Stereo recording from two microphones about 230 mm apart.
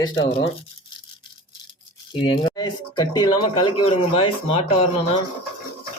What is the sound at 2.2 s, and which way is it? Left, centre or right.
Speech, centre.